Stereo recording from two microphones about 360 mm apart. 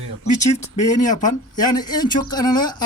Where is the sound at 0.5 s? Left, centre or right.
Centre.